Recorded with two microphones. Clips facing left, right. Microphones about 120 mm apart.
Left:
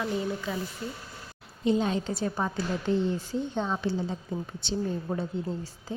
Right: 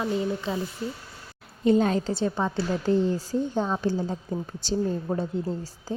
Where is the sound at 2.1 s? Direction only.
30° right (ahead or behind).